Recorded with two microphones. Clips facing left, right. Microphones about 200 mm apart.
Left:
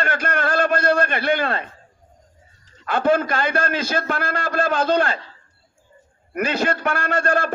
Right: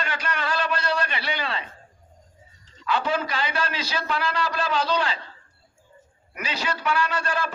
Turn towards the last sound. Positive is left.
turn(degrees=50)  # may be behind; listen again after turning